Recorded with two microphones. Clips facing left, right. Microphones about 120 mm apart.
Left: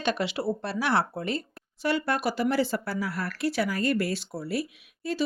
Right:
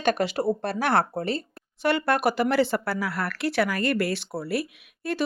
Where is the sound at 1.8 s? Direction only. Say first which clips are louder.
Right 4 dB; 60° right (ahead or behind).